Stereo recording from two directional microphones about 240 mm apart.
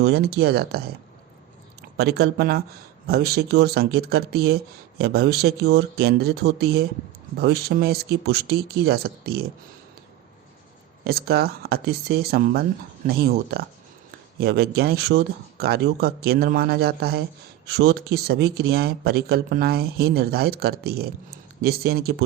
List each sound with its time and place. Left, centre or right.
0.0 s speech: right
2.0 s speech: right
11.0 s speech: right